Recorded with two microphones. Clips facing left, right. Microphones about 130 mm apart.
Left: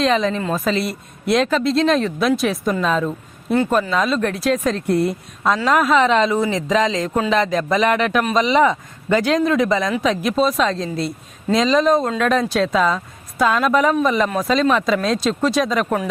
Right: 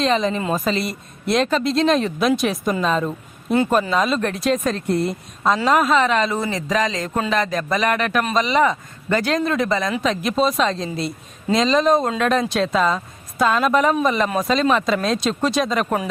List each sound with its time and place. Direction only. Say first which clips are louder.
0.0 s speech: left 1 dB; centre (ahead or behind)
0.6 s speech: left 2 dB; centre (ahead or behind)
4.2 s speech: left 1 dB; 5° left (ahead or behind)
4.5 s speech: left 1 dB; 15° right (ahead or behind)
4.9 s speech: left 3 dB; 10° left (ahead or behind)
6.0 s speech: left 3 dB; 20° left (ahead or behind); by 16.0 s 5° right (ahead or behind)